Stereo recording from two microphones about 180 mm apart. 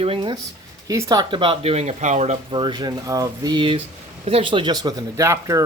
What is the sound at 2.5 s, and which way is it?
Speech, 25° right (ahead or behind).